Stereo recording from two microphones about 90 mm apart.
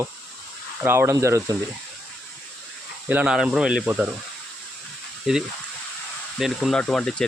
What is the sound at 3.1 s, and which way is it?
Speech, 10° right (ahead or behind).